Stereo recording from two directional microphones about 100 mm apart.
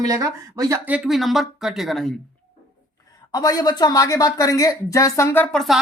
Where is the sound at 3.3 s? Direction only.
40° left (ahead or behind).